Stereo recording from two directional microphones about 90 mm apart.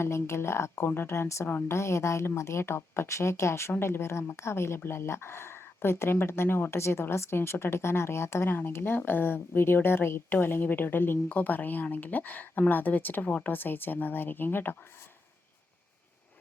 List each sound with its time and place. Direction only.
0.0 s a woman's voice: 30° left (ahead or behind)